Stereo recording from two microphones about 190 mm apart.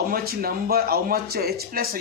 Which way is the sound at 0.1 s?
50° right (ahead or behind).